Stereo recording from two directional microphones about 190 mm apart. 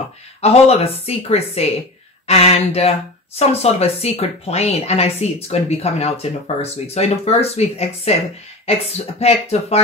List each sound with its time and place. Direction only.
0.4 s speech: 35° left (ahead or behind)